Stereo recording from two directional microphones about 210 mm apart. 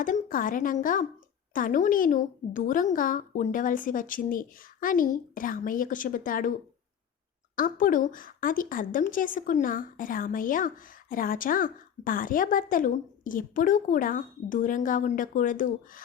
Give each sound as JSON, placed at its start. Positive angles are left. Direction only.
{"t": 0.0, "sound": "a woman's voice", "side_deg": 40}
{"t": 7.5, "sound": "a woman's voice", "side_deg": 40}